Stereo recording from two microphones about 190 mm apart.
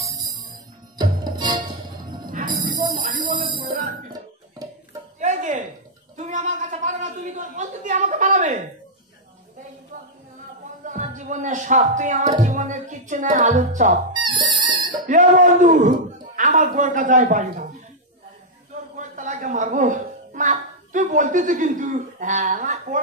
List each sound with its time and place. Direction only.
0.0 s music: 20° right (ahead or behind)
3.0 s speech: 45° right (ahead or behind)
3.4 s music: 25° right (ahead or behind)
5.2 s a sound: 40° right (ahead or behind)
6.1 s gargling: 40° right (ahead or behind)
7.3 s a woman's voice: 40° right (ahead or behind)
10.8 s speech: 40° right (ahead or behind)
14.2 s music: 25° right (ahead or behind)
15.0 s a woman's voice: 40° right (ahead or behind)
18.9 s speech: 40° right (ahead or behind)